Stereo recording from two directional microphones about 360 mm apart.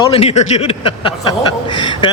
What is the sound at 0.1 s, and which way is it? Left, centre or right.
Speech, centre.